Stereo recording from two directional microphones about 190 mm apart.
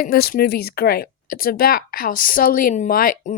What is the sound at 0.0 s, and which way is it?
Speech, 55° left (ahead or behind).